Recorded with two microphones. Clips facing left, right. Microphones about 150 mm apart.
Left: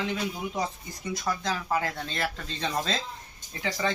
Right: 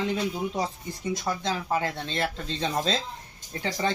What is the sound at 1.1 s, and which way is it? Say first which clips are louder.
Speech: right 1 dB; 25° right (ahead or behind).